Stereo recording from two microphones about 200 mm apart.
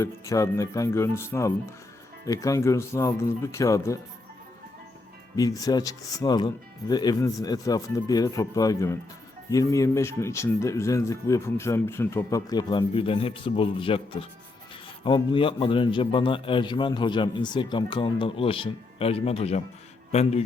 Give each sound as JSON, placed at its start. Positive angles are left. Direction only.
{"t": 0.0, "sound": "speech", "side_deg": 15}
{"t": 5.4, "sound": "a man's voice", "side_deg": 20}